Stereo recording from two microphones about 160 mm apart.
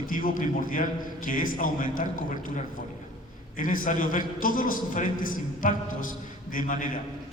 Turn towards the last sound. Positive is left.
turn(degrees=55)  # may be behind; listen again after turning